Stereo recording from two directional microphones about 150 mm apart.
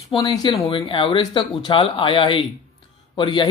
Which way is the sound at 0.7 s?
35° left (ahead or behind).